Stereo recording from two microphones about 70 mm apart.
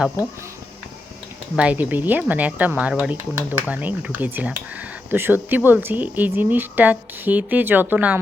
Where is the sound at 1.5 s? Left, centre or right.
Right.